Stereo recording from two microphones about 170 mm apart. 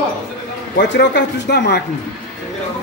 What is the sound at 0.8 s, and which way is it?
Speech, 85° left.